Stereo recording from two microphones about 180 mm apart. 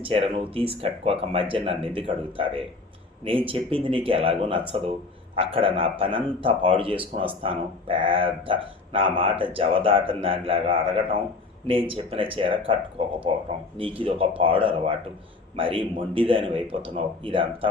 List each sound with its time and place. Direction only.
0.0 s speech: 30° right (ahead or behind)